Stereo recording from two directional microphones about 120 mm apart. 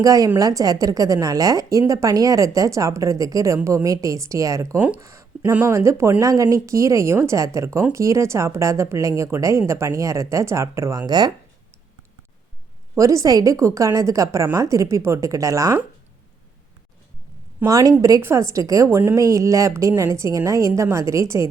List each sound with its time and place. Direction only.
0.0 s a woman's voice: 30° right (ahead or behind)
13.0 s a woman's voice: 30° right (ahead or behind)
17.7 s a woman's voice: 25° right (ahead or behind)